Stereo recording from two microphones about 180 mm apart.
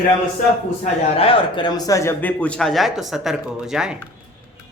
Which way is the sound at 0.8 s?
30° left (ahead or behind).